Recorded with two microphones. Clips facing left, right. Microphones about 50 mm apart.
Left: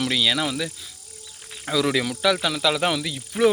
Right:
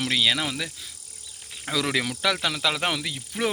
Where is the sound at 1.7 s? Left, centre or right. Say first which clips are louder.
Left 4 dB; right.